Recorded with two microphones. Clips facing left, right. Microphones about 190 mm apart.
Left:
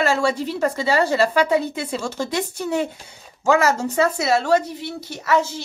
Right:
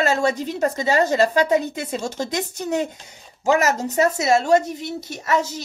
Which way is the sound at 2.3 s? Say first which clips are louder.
Left 1 dB; 20° right (ahead or behind).